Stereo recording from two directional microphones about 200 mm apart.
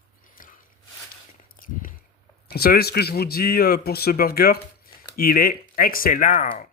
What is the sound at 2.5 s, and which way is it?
Speech, 50° left (ahead or behind).